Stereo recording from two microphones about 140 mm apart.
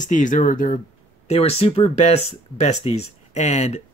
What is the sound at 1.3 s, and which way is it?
Speech, 45° left (ahead or behind).